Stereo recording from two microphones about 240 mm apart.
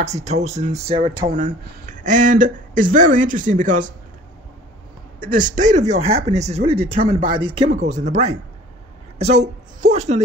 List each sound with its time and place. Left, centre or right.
0.0 s speech: right
1.2 s speech: right
5.2 s a woman's voice: right